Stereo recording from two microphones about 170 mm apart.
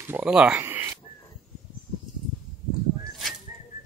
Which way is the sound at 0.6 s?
15° right (ahead or behind).